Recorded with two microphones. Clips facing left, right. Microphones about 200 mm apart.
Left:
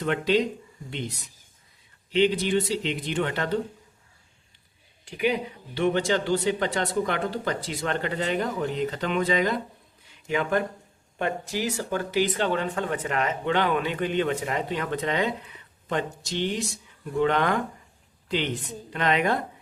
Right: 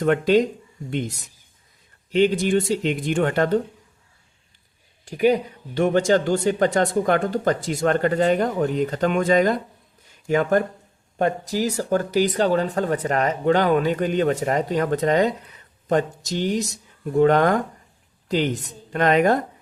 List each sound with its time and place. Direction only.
0.0 s speech: 45° right (ahead or behind)
5.0 s speech: 40° right (ahead or behind)
10.1 s a sound: 45° right (ahead or behind)
11.2 s speech: 40° right (ahead or behind)